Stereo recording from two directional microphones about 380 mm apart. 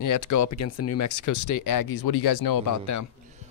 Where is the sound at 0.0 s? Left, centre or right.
Left.